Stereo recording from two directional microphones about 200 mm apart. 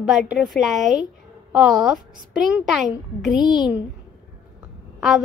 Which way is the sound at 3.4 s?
20° left (ahead or behind).